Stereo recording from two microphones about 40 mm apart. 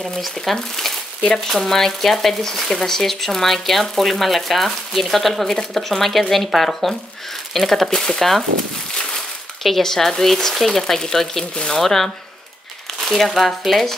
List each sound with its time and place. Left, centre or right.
0.0 s speech: centre
9.6 s speech: centre
11.8 s speech: centre
13.2 s speech: centre